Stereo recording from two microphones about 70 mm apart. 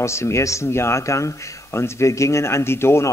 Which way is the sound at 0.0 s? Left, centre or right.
Left.